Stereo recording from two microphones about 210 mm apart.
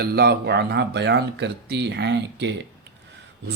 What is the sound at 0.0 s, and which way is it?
A man's voice, 50° right (ahead or behind).